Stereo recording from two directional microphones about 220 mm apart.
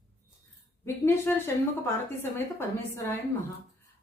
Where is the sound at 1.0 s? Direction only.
10° left (ahead or behind).